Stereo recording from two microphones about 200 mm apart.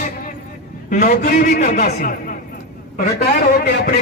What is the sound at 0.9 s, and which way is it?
A man's voice, 45° left (ahead or behind).